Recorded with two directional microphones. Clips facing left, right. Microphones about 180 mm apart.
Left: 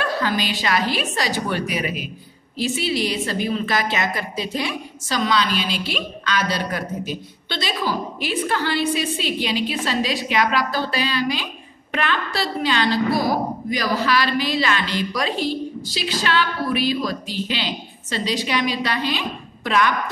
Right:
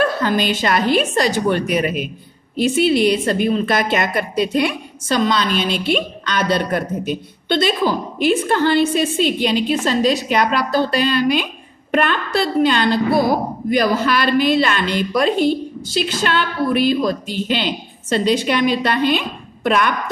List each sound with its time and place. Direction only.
0.0 s a woman's voice: 50° right (ahead or behind)
5.5 s a woman's voice: 5° left (ahead or behind)
6.3 s a woman's voice: 55° right (ahead or behind)